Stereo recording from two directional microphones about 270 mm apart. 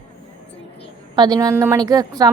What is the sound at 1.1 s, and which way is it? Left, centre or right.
Speech, centre.